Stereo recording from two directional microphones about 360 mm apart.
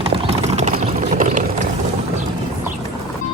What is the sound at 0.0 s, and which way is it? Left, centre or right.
Clip-clop, centre.